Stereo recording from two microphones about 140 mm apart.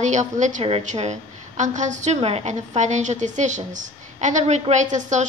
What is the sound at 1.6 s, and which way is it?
A woman's voice, 60° right (ahead or behind).